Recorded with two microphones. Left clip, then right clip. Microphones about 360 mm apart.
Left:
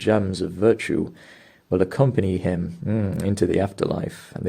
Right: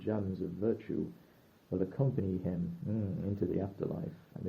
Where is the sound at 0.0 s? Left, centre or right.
Left.